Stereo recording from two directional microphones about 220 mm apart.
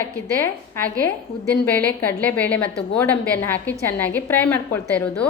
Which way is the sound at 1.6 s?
10° left (ahead or behind).